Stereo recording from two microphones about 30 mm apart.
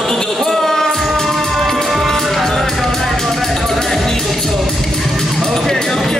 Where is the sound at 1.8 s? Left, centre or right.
Centre.